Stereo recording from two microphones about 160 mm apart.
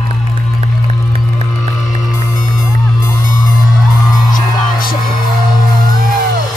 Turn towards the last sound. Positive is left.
turn(degrees=65)  # may be behind; listen again after turning